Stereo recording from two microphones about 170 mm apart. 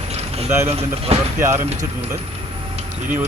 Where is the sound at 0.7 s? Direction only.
35° right (ahead or behind).